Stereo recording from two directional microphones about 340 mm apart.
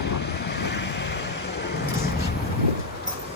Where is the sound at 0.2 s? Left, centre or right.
Left.